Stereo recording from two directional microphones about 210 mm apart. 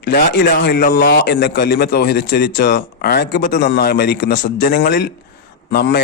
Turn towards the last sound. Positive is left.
turn(degrees=50)  # may be behind; listen again after turning